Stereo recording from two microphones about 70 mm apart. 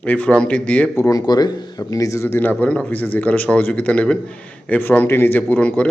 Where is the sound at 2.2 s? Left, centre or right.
Left.